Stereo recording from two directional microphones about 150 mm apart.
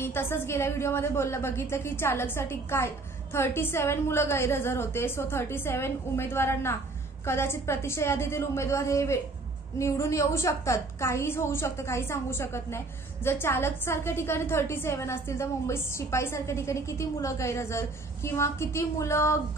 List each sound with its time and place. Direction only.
0.0 s a woman's voice: 15° left (ahead or behind)